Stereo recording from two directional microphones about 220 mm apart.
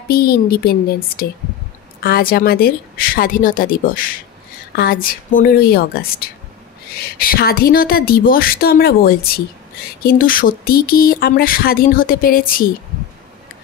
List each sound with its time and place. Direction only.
0.1 s speech: 45° left (ahead or behind)